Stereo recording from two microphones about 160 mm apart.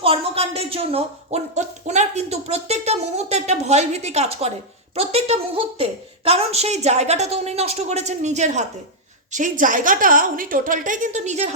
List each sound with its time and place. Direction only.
0.0 s a woman's voice: 35° right (ahead or behind)